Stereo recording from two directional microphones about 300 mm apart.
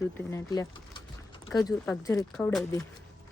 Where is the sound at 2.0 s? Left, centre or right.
Centre.